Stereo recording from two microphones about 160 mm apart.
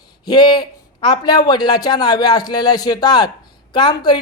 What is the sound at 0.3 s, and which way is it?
Speech, 25° left (ahead or behind).